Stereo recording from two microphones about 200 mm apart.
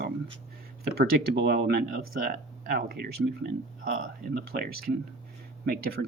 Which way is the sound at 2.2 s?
45° right (ahead or behind).